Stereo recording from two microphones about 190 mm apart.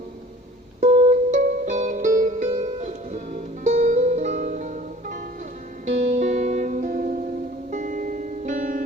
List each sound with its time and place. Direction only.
0.8 s music: 35° right (ahead or behind)